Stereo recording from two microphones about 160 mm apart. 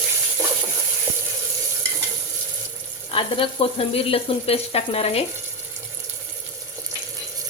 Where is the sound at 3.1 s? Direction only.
35° left (ahead or behind).